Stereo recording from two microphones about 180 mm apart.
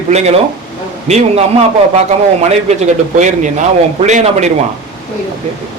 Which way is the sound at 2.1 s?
40° right (ahead or behind).